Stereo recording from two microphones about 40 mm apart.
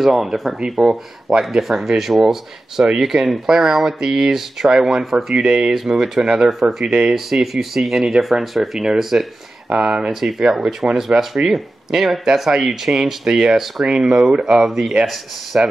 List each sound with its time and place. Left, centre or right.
0.0 s speech: centre; by 5.7 s right
5.7 s speech: centre
6.9 s speech: right
7.2 s speech: centre
9.7 s speech: right
10.2 s speech: centre
15.5 s speech: right